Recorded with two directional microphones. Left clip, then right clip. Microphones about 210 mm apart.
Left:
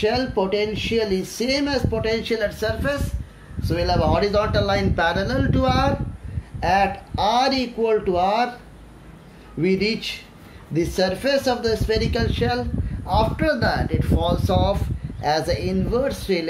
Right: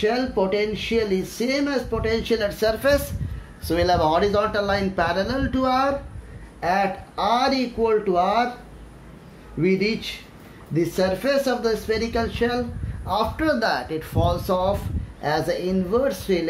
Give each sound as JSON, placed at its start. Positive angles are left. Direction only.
{"t": 0.0, "sound": "speech", "side_deg": 0}
{"t": 2.3, "sound": "speech", "side_deg": -25}
{"t": 9.6, "sound": "speech", "side_deg": 0}